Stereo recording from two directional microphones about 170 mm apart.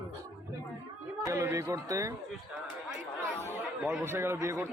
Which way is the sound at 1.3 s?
15° right (ahead or behind).